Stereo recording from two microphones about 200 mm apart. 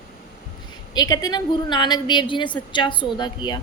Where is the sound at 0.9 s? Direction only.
20° left (ahead or behind).